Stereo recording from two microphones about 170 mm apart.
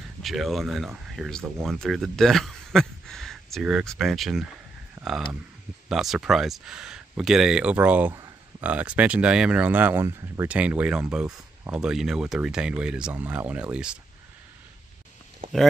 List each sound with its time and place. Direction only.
0.2 s speech: centre (ahead or behind)
5.0 s a sound: 25° right (ahead or behind)
5.9 s speech: 5° right (ahead or behind)
11.8 s speech: centre (ahead or behind)